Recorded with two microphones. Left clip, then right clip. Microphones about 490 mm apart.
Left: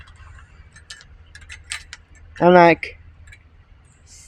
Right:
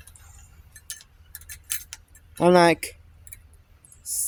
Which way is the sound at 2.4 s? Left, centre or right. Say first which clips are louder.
Left 5 dB; right.